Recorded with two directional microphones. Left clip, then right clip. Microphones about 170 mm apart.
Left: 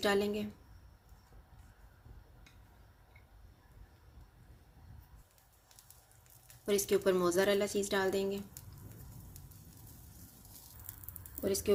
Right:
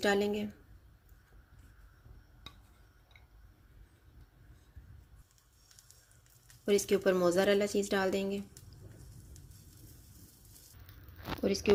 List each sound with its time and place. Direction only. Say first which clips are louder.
0.0 s speech: right 2 dB; 35° right (ahead or behind)
6.7 s speech: right 2 dB; 35° right (ahead or behind)
11.4 s speech: right 2 dB; 40° right (ahead or behind)